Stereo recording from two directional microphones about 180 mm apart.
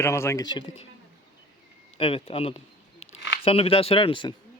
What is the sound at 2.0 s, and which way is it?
Speech, 30° left (ahead or behind).